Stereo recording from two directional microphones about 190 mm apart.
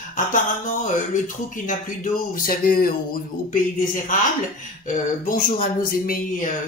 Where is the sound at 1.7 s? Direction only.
45° left (ahead or behind).